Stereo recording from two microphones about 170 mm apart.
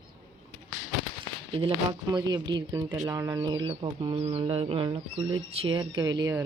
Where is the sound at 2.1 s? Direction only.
25° right (ahead or behind).